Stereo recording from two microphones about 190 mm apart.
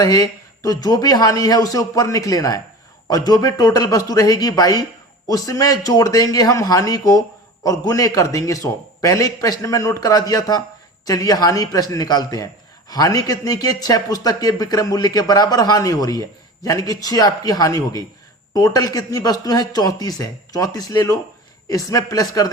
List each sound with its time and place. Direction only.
0.0 s a man's voice: 20° left (ahead or behind)